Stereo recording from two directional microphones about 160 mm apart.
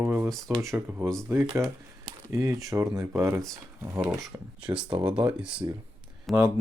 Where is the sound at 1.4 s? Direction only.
30° right (ahead or behind).